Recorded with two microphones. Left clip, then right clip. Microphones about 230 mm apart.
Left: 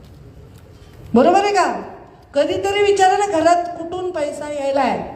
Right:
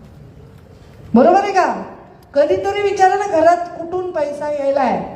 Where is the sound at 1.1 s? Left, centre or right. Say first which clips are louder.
Right 2 dB; left.